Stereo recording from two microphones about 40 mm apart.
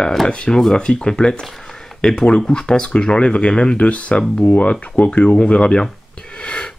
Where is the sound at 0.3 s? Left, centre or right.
Left.